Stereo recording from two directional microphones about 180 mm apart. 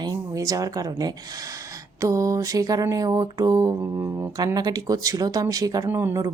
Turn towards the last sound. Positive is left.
turn(degrees=-15)  # may be behind; listen again after turning